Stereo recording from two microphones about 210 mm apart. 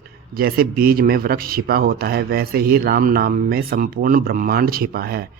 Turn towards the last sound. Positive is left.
turn(degrees=-45)  # may be behind; listen again after turning